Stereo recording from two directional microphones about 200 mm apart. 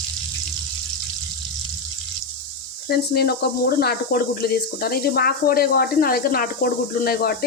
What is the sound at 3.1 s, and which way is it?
Speech, 50° left (ahead or behind).